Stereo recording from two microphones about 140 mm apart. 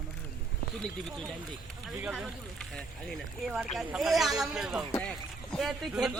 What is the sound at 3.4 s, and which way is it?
Speech, 5° right (ahead or behind).